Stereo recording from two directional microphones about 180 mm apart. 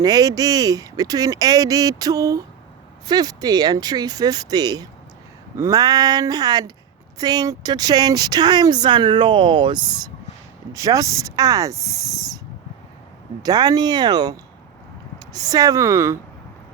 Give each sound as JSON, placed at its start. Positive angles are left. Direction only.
{"t": 0.0, "sound": "speech", "side_deg": -20}
{"t": 13.4, "sound": "speech", "side_deg": -20}